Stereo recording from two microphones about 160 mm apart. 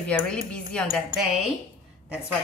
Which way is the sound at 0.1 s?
5° left (ahead or behind).